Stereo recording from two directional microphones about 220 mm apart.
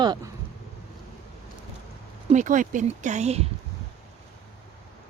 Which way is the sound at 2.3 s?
35° right (ahead or behind).